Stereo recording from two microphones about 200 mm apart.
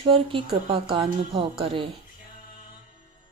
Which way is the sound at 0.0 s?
25° right (ahead or behind).